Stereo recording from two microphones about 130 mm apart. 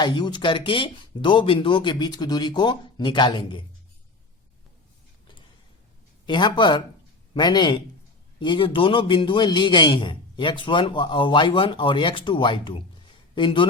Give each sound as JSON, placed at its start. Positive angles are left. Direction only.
{"t": 0.0, "sound": "a man's voice", "side_deg": 35}
{"t": 6.2, "sound": "a man's voice", "side_deg": 35}